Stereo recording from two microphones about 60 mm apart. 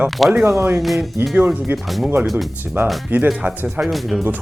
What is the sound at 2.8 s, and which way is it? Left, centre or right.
Speech, right.